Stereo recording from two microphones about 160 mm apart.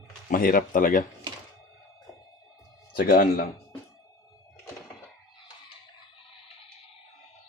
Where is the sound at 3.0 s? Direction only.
60° left (ahead or behind).